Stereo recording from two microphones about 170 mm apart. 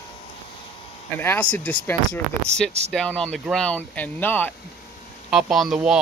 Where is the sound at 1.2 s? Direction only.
10° left (ahead or behind).